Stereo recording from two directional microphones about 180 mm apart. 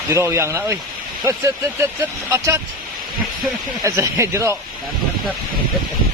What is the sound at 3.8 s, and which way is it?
Speech, 15° right (ahead or behind).